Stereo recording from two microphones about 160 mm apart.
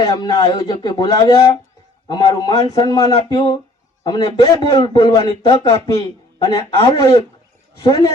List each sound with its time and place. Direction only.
0.0 s a man's voice: 25° left (ahead or behind)